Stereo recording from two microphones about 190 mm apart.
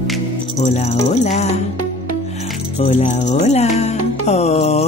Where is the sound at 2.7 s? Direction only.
35° left (ahead or behind).